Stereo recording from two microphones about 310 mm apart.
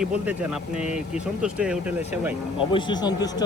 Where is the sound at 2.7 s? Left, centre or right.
Centre.